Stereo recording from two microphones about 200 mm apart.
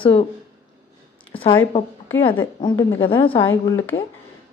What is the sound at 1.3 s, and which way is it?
Speech, 25° left (ahead or behind).